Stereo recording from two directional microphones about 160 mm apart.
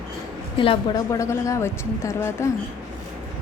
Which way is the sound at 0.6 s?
30° left (ahead or behind).